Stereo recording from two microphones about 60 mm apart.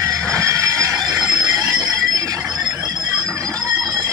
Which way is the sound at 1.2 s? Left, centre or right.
Right.